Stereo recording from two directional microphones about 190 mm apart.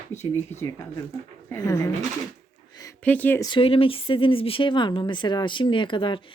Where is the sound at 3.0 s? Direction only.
10° left (ahead or behind).